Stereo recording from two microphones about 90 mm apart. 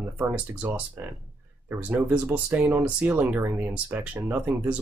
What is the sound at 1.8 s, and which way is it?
Speech, 15° right (ahead or behind).